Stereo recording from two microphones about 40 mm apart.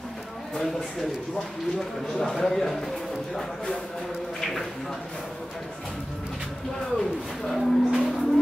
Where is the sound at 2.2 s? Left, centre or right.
Centre.